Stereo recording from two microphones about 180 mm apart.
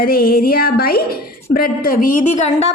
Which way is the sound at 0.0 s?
55° left (ahead or behind).